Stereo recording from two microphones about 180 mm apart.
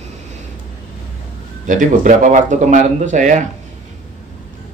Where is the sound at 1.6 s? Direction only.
45° right (ahead or behind).